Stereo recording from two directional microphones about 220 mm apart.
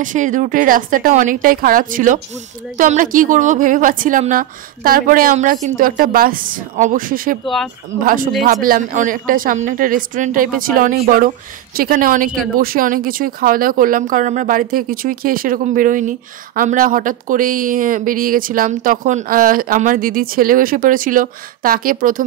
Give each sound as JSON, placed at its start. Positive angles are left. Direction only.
{"t": 0.0, "sound": "speech", "side_deg": -35}
{"t": 7.4, "sound": "speech", "side_deg": 0}
{"t": 8.0, "sound": "speech", "side_deg": -40}